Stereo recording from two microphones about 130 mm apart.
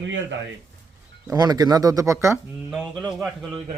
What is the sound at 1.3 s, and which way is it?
Speech, 30° right (ahead or behind).